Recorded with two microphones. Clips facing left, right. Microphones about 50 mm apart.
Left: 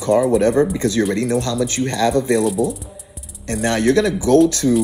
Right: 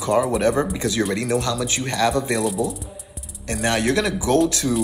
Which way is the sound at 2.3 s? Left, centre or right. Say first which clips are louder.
Left 5 dB; centre.